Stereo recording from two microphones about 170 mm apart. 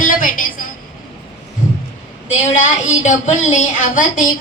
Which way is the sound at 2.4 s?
45° left (ahead or behind).